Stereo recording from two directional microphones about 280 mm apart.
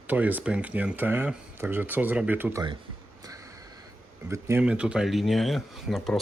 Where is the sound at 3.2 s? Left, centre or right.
Centre.